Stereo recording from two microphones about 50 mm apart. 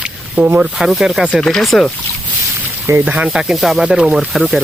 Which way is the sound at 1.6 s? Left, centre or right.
Centre.